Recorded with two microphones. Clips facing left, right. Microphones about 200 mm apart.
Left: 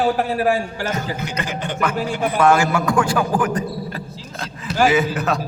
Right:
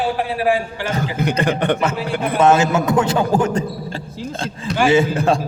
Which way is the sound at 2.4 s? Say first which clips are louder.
Right 2 dB; 20° right (ahead or behind).